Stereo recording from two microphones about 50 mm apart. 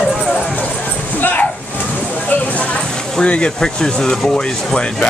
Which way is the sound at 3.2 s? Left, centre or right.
Centre.